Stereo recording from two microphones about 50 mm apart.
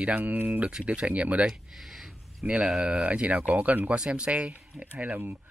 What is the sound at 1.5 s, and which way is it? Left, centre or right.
Speech, centre.